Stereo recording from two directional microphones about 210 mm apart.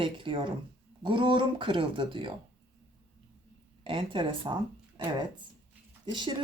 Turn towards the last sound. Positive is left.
turn(degrees=-20)  # may be behind; listen again after turning